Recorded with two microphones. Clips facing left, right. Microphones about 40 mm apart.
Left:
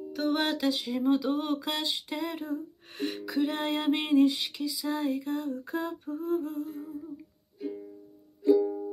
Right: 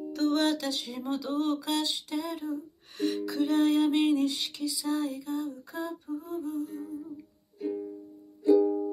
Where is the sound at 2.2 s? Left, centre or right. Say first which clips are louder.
Right 2 dB; left.